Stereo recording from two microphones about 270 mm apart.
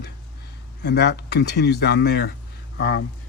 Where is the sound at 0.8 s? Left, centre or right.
Left.